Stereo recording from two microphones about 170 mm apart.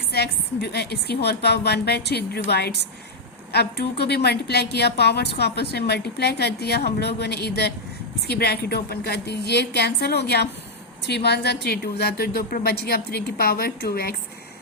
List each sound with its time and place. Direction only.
0.1 s a woman's voice: 75° left (ahead or behind)